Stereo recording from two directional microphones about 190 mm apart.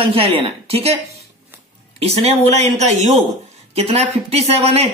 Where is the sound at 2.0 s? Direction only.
35° right (ahead or behind).